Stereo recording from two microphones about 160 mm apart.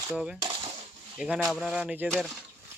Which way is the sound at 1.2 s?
5° right (ahead or behind).